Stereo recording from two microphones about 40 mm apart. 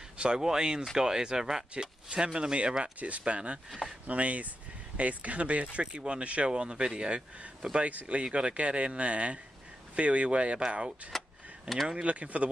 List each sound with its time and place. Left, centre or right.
0.2 s speech: centre
11.9 s speech: right